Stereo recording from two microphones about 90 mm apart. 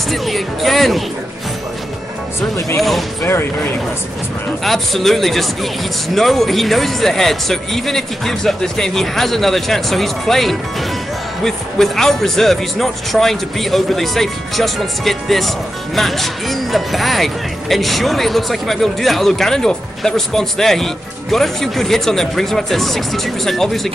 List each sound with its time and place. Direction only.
0.1 s speech: centre (ahead or behind)
3.3 s speech: 25° left (ahead or behind)
4.6 s speech: centre (ahead or behind)